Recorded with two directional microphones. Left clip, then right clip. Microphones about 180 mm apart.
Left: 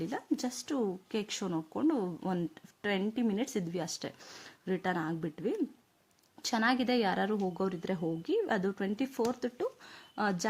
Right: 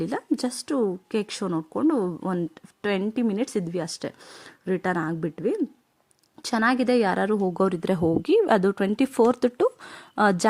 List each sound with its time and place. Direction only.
0.0 s speech: 35° right (ahead or behind)